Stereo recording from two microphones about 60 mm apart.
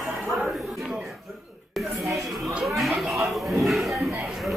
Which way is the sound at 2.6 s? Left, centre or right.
Centre.